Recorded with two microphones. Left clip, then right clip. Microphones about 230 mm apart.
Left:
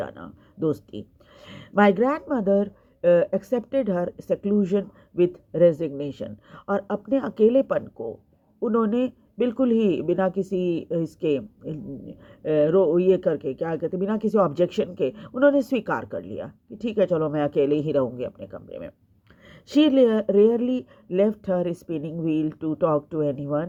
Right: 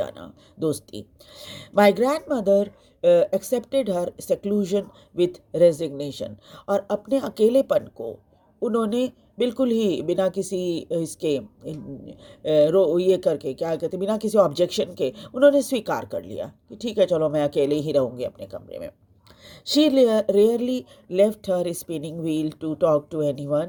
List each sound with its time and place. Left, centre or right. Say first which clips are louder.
0.0 s speech: right 3 dB; right